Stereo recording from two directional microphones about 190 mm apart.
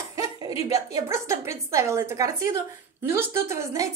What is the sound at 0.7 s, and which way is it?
A woman's voice, 15° right (ahead or behind).